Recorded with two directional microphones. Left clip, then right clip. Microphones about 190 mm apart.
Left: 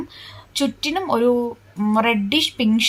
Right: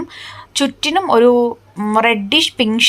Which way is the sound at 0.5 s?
25° right (ahead or behind).